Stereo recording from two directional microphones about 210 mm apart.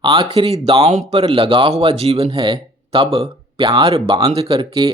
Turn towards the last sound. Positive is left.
turn(degrees=-25)  # may be behind; listen again after turning